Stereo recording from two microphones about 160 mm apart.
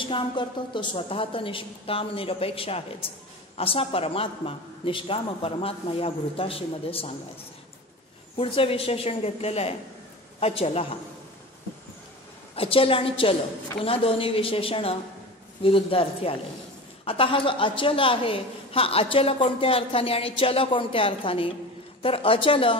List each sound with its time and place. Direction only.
0.0 s a woman's voice: 30° left (ahead or behind)
8.4 s a woman's voice: 35° left (ahead or behind)
12.5 s a woman's voice: 35° left (ahead or behind)